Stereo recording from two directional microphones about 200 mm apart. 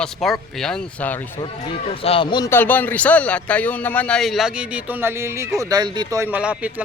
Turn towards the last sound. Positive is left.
turn(degrees=-5)  # may be behind; listen again after turning